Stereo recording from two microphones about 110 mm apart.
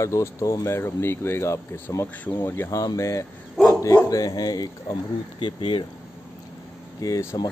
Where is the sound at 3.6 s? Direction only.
5° left (ahead or behind).